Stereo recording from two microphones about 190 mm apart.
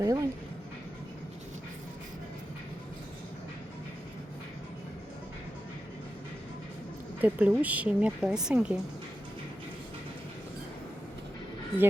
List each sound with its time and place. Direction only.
0.0 s a woman's voice: 15° right (ahead or behind)
7.2 s a woman's voice: 10° right (ahead or behind)